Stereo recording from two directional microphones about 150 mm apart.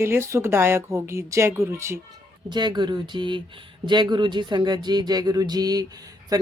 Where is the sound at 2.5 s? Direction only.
30° right (ahead or behind).